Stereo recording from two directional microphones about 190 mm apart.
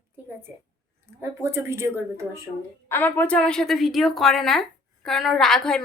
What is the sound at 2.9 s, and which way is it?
A woman's voice, 10° left (ahead or behind).